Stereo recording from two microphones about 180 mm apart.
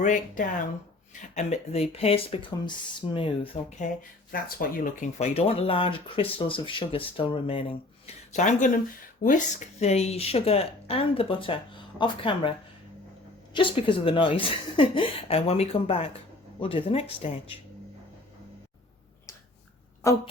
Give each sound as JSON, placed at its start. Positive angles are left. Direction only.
{"t": 0.0, "sound": "speech", "side_deg": 45}
{"t": 4.3, "sound": "speech", "side_deg": 55}
{"t": 20.0, "sound": "speech", "side_deg": 15}